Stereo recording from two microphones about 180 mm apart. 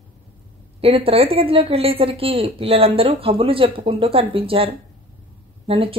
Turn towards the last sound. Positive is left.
turn(degrees=-30)  # may be behind; listen again after turning